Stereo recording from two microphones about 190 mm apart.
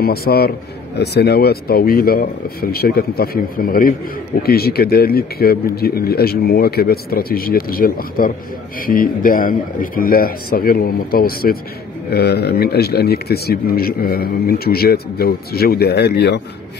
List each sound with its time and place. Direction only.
0.0 s a man's voice: 55° left (ahead or behind)